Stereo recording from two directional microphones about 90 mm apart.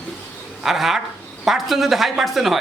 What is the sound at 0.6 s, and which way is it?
A man's voice, 5° right (ahead or behind).